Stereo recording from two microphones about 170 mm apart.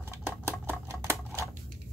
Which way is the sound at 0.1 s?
15° right (ahead or behind).